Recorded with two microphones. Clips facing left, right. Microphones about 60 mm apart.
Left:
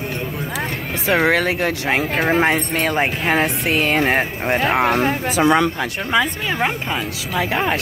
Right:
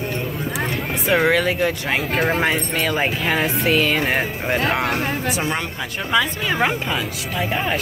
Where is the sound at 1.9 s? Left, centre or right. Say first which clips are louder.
Left 2 dB; left.